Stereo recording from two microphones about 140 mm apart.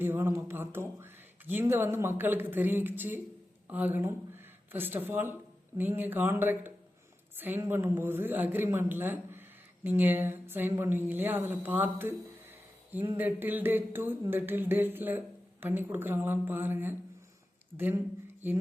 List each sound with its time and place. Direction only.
0.0 s a man's voice: 15° right (ahead or behind)